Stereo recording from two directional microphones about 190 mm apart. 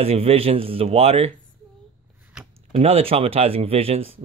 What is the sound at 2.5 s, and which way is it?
Speech, 30° right (ahead or behind).